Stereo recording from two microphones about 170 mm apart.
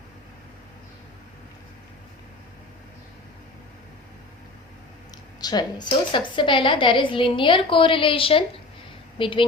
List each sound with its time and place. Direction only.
5.4 s a woman's voice: 25° left (ahead or behind)